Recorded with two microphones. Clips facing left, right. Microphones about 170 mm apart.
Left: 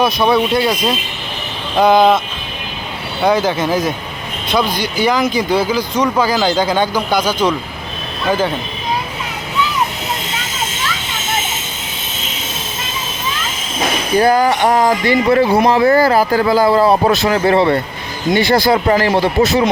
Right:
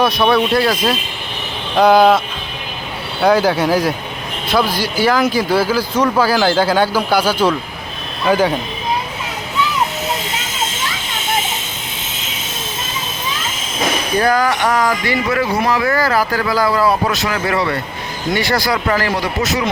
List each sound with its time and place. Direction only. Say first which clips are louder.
0.2 s speech: left 1 dB; 20° left (ahead or behind)
0.5 s speech: even; centre (ahead or behind)
14.2 s speech: left 4 dB; 25° left (ahead or behind)